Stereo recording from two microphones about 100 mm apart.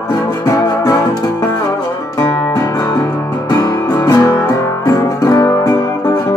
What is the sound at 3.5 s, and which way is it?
Music, 40° left (ahead or behind).